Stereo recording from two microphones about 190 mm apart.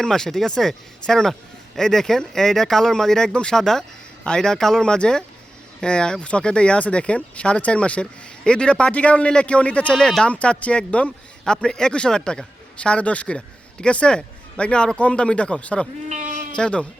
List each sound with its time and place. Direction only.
0.0 s a man's voice: 5° left (ahead or behind)
16.0 s bleat: 40° right (ahead or behind)
16.6 s a man's voice: 5° left (ahead or behind)